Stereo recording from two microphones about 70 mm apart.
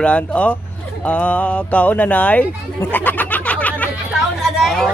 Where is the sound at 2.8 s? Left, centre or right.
Left.